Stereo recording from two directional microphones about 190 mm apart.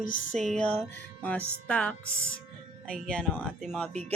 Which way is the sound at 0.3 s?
Centre (ahead or behind).